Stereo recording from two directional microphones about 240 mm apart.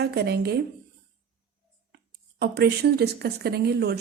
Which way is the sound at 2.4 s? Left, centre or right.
Right.